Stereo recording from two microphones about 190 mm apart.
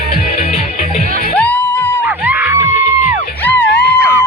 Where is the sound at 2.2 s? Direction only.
10° right (ahead or behind).